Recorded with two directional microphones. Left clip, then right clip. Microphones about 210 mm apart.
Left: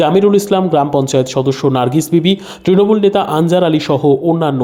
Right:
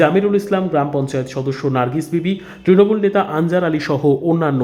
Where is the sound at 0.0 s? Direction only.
20° left (ahead or behind); by 4.3 s 5° left (ahead or behind).